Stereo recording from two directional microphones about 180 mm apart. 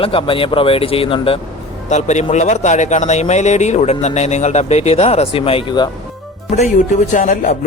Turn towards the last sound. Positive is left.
turn(degrees=45)  # may be behind; listen again after turning